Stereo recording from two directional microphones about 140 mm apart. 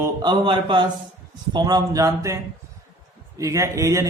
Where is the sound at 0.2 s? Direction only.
30° right (ahead or behind).